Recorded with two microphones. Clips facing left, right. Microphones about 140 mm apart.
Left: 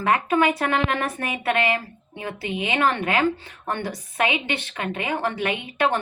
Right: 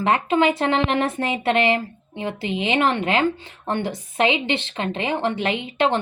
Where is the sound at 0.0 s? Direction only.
25° right (ahead or behind).